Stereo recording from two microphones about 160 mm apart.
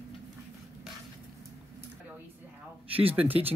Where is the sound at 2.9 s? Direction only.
35° right (ahead or behind).